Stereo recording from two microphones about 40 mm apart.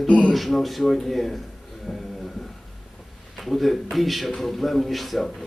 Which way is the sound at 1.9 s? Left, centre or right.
Centre.